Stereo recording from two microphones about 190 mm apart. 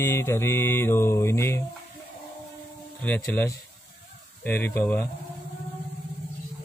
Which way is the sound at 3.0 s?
5° left (ahead or behind).